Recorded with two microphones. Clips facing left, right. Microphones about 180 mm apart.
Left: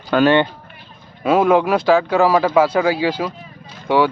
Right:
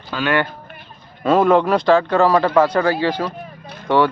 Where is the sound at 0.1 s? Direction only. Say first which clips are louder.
Left 10 dB; 65° left (ahead or behind).